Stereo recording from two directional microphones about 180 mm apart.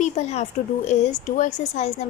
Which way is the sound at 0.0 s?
40° left (ahead or behind).